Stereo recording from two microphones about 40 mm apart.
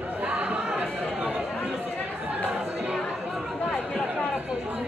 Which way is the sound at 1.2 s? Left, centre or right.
Right.